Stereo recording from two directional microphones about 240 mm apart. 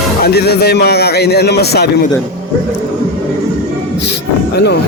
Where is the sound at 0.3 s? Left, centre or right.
Left.